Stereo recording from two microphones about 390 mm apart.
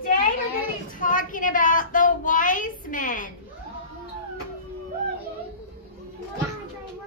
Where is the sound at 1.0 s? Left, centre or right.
Centre.